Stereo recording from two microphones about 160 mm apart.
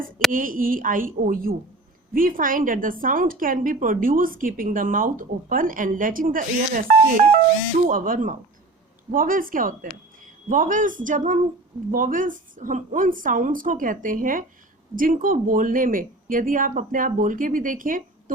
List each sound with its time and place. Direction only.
0.3 s a woman's voice: 60° right (ahead or behind)